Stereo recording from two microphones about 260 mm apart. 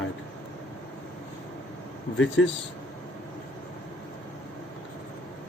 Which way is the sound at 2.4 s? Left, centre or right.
Left.